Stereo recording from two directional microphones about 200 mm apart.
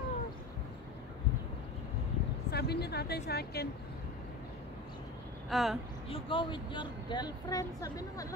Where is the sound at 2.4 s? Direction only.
55° left (ahead or behind).